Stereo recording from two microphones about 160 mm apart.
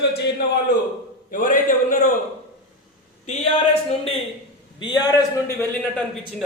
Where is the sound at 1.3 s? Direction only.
55° left (ahead or behind).